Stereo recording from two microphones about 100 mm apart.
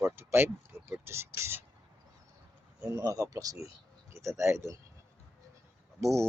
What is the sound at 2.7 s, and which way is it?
Speech, 40° right (ahead or behind).